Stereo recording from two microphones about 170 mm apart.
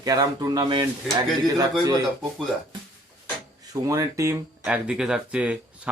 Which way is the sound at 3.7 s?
20° right (ahead or behind).